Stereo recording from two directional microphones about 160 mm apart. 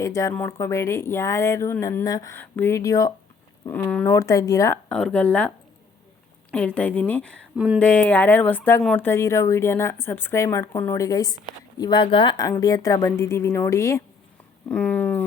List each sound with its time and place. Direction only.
0.0 s a woman's voice: 20° left (ahead or behind)
4.9 s speech: 5° left (ahead or behind)
6.5 s speech: 5° left (ahead or behind)
7.5 s speech: 5° right (ahead or behind)
7.8 s speech: 10° left (ahead or behind)
9.0 s a woman's voice: 15° left (ahead or behind)